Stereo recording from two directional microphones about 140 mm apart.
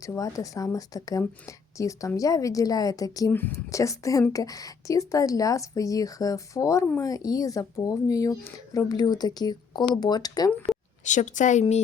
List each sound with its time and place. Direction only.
0.0 s a woman's voice: 25° left (ahead or behind)
11.0 s speech: 60° left (ahead or behind)